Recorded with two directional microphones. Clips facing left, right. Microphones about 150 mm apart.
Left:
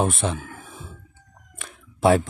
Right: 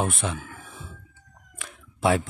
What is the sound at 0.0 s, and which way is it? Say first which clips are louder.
Speech: left 4 dB; 30° left (ahead or behind).